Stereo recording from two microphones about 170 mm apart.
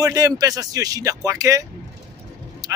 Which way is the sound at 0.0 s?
20° right (ahead or behind).